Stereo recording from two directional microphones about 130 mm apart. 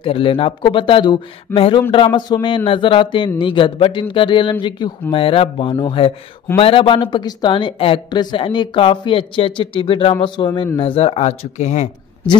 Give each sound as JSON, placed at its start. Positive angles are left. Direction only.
{"t": 0.0, "sound": "a woman's voice", "side_deg": 45}
{"t": 10.8, "sound": "speech", "side_deg": 45}